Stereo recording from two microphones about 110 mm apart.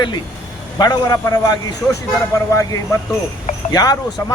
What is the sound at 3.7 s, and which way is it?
Speech, 35° left (ahead or behind).